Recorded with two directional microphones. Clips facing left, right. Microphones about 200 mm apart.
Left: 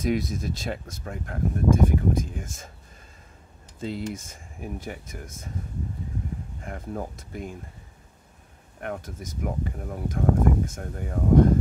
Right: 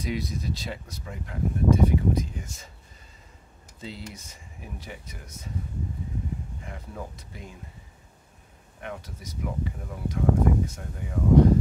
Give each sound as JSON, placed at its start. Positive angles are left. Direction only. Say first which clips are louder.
{"t": 0.0, "sound": "speech", "louder": "left 5 dB", "side_deg": 50}
{"t": 3.8, "sound": "speech", "louder": "left 8 dB", "side_deg": 50}
{"t": 6.6, "sound": "speech", "louder": "left 5 dB", "side_deg": 50}
{"t": 8.8, "sound": "speech", "louder": "left 4 dB", "side_deg": 50}